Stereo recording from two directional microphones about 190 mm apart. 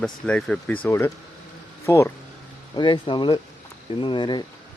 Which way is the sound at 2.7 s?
25° left (ahead or behind).